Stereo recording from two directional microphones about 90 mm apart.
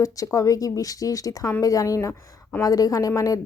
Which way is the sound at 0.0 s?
40° left (ahead or behind).